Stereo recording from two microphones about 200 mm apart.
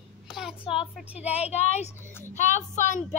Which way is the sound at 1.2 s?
30° left (ahead or behind).